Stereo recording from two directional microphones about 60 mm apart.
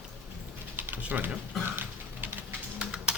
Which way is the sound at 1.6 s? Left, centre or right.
Right.